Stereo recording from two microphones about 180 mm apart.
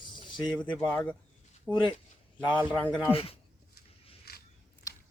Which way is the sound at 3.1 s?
30° left (ahead or behind).